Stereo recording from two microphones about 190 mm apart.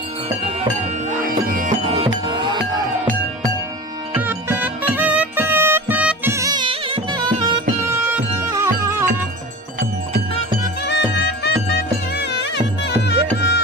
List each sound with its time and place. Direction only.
1.2 s music: 45° right (ahead or behind)
1.9 s music: 25° right (ahead or behind)
4.1 s music: 10° right (ahead or behind)
8.6 s music: 15° right (ahead or behind)
10.8 s music: 60° left (ahead or behind)